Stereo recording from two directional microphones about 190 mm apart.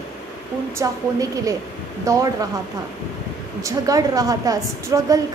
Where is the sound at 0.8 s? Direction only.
20° right (ahead or behind).